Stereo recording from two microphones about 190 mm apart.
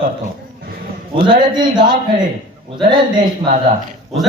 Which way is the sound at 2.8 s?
25° right (ahead or behind).